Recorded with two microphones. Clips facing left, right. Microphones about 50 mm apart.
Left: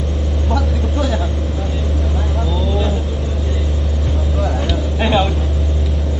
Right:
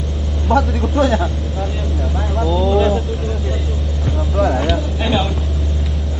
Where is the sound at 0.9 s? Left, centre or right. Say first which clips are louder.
Right 6 dB; right.